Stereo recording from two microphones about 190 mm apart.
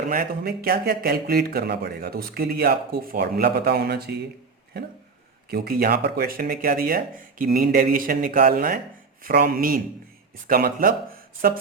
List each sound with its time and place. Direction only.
0.1 s speech: 50° right (ahead or behind)
5.5 s speech: 55° right (ahead or behind)